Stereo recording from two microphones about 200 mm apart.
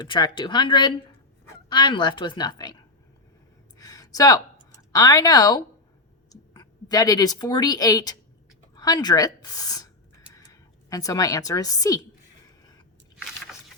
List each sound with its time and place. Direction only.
0.0 s a woman's voice: 25° left (ahead or behind)
3.8 s a sound: 15° left (ahead or behind)
4.9 s a woman's voice: 20° left (ahead or behind)